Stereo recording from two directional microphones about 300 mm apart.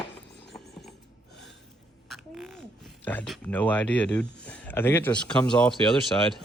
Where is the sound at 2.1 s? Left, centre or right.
Centre.